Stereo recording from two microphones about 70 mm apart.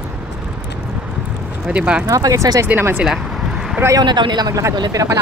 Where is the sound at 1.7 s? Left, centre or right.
Centre.